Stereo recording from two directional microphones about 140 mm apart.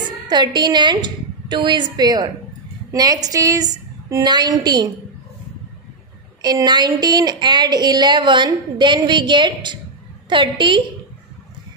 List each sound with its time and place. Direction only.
0.3 s a woman's voice: 30° right (ahead or behind)
6.4 s speech: 30° right (ahead or behind)